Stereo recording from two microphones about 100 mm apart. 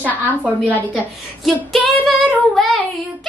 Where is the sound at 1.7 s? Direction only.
5° left (ahead or behind).